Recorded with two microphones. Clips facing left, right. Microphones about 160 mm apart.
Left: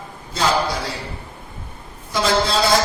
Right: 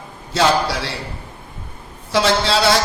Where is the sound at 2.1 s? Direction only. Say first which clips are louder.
Right 2 dB; 80° right.